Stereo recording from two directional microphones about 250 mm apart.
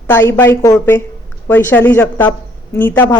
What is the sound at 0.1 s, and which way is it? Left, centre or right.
Speech, centre.